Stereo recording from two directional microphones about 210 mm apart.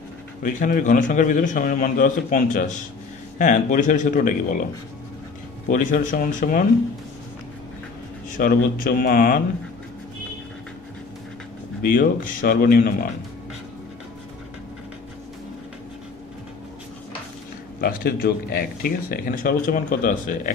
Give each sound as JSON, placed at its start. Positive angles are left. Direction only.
{"t": 0.4, "sound": "a man's voice", "side_deg": 40}
{"t": 5.7, "sound": "a man's voice", "side_deg": 40}
{"t": 8.4, "sound": "a man's voice", "side_deg": 40}
{"t": 11.8, "sound": "a man's voice", "side_deg": 40}
{"t": 17.7, "sound": "speech", "side_deg": 45}